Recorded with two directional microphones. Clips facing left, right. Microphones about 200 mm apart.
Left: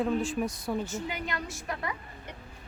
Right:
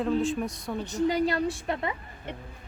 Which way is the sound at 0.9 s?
35° right (ahead or behind).